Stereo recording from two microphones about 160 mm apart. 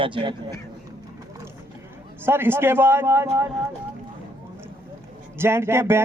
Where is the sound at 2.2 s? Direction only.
15° right (ahead or behind).